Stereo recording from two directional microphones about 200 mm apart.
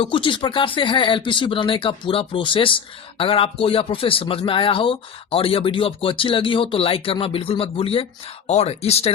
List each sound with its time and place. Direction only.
0.0 s speech: 25° left (ahead or behind)